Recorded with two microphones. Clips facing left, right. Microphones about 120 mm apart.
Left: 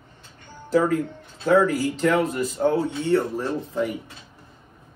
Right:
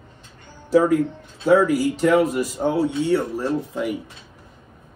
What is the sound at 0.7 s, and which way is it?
Speech, 10° right (ahead or behind).